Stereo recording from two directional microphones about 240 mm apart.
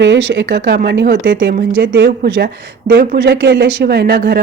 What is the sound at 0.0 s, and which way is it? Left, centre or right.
Speech, right.